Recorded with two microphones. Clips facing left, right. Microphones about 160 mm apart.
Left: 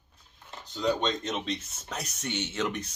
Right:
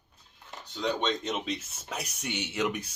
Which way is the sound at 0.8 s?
Centre (ahead or behind).